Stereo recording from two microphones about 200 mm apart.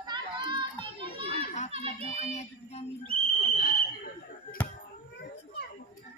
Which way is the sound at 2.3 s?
35° left (ahead or behind).